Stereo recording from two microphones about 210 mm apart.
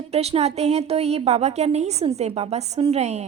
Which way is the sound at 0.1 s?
30° right (ahead or behind).